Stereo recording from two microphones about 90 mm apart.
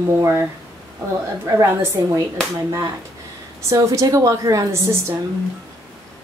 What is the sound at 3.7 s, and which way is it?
A woman's voice, 35° right (ahead or behind).